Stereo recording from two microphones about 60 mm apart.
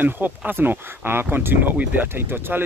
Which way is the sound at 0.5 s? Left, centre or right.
Right.